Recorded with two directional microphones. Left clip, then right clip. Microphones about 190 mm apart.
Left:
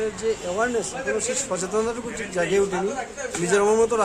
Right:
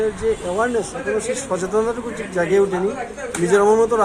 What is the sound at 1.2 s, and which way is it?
A man's voice, 10° left (ahead or behind).